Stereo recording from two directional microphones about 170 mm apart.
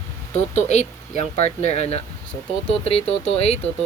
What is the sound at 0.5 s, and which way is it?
Speech, 40° left (ahead or behind).